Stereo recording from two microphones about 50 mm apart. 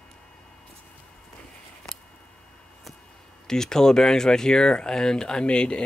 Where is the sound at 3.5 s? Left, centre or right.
Centre.